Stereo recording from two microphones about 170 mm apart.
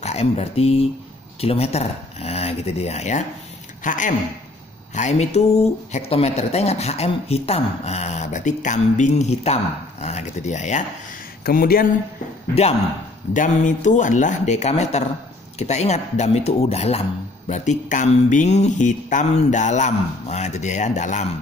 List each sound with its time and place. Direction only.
0.0 s speech: 40° left (ahead or behind)
11.4 s speech: 60° left (ahead or behind)
13.3 s speech: 50° left (ahead or behind)